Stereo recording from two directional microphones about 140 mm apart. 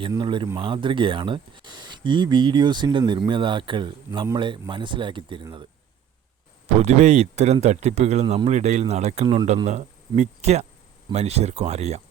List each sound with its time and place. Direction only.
0.2 s speech: 35° right (ahead or behind)
6.7 s speech: 55° right (ahead or behind)